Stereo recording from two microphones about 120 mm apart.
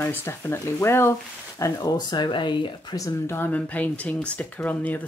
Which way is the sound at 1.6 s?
30° left (ahead or behind).